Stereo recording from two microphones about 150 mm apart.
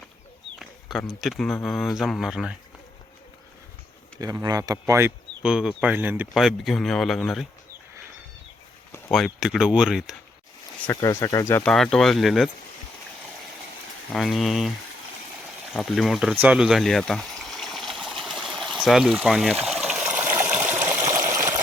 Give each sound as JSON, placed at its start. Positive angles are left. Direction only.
{"t": 0.6, "sound": "speech", "side_deg": 0}
{"t": 4.4, "sound": "speech", "side_deg": -25}
{"t": 5.4, "sound": "speech", "side_deg": -5}
{"t": 9.1, "sound": "speech", "side_deg": 0}
{"t": 11.0, "sound": "speech", "side_deg": 20}
{"t": 11.7, "sound": "speech", "side_deg": 5}
{"t": 14.1, "sound": "speech", "side_deg": 0}
{"t": 15.7, "sound": "speech", "side_deg": 0}
{"t": 16.3, "sound": "a sound", "side_deg": -10}
{"t": 18.2, "sound": "water", "side_deg": 0}